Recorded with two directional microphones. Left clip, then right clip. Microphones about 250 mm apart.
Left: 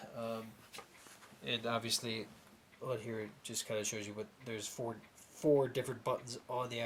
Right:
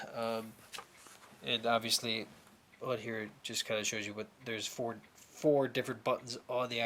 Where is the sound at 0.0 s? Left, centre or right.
Centre.